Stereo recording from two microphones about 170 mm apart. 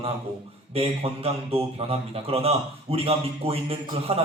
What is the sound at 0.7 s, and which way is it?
A man's voice, 35° right (ahead or behind).